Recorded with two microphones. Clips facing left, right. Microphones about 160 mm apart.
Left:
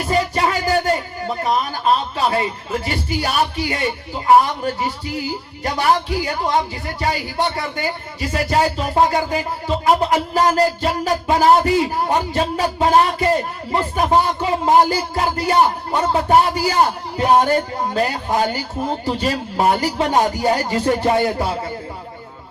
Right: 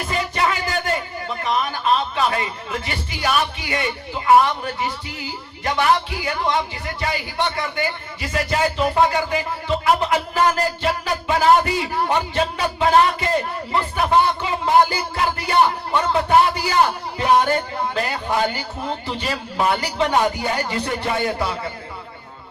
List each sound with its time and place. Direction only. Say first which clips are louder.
0.1 s music: left 4 dB; 40° left (ahead or behind)
2.1 s speech: left 2 dB; 35° left (ahead or behind)